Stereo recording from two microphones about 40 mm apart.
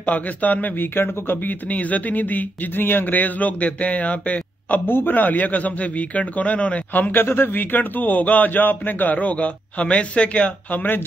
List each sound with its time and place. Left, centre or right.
0.0 s a man's voice: left
1.7 s a man's voice: left
4.8 s a man's voice: left
7.0 s a man's voice: left
10.7 s a man's voice: left